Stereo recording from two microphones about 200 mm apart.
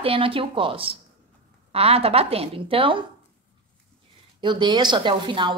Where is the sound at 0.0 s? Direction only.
25° right (ahead or behind).